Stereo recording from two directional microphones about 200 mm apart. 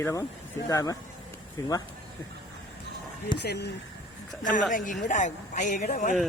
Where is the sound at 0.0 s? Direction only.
15° left (ahead or behind).